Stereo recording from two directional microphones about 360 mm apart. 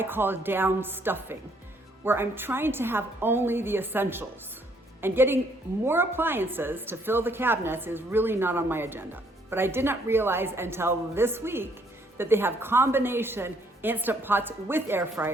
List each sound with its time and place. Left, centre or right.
0.0 s a woman's voice: centre